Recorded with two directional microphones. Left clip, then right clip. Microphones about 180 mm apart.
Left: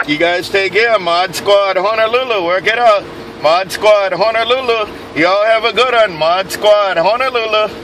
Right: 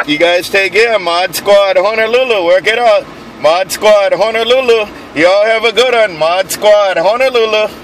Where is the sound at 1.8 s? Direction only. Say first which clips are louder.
Right 3 dB; 35° right (ahead or behind).